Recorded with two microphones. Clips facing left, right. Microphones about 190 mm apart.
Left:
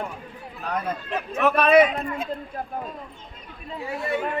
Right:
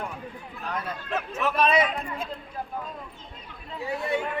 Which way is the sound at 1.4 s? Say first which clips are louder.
Left 7 dB; 60° left (ahead or behind).